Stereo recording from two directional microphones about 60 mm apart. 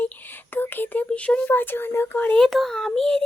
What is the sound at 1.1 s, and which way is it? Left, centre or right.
Speech, left.